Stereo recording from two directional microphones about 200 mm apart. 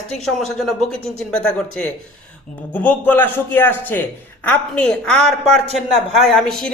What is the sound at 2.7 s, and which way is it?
A man's voice, 10° left (ahead or behind).